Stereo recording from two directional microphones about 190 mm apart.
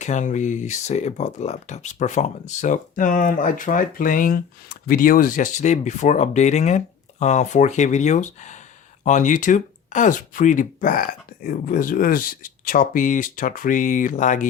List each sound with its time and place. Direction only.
0.0 s speech: 40° left (ahead or behind)